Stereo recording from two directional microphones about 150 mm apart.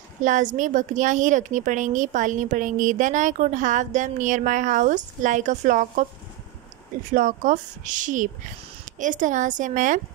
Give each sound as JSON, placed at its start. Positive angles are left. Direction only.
{"t": 0.2, "sound": "a woman's voice", "side_deg": -55}
{"t": 7.1, "sound": "a woman's voice", "side_deg": -60}